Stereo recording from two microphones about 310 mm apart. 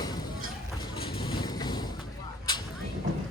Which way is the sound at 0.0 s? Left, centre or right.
Centre.